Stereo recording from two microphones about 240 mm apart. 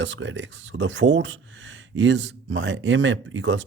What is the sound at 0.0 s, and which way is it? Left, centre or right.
Speech, right.